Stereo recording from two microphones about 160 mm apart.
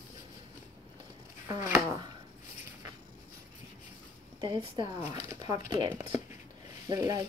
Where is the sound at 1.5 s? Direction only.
20° right (ahead or behind).